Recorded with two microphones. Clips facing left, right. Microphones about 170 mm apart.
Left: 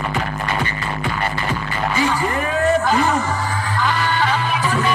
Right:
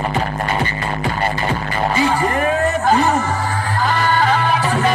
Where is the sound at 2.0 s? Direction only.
40° right (ahead or behind).